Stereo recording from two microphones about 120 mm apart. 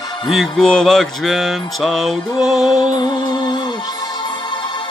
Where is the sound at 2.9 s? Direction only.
35° left (ahead or behind).